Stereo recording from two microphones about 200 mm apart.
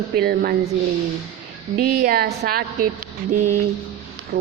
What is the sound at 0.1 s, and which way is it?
Speech, 50° right (ahead or behind).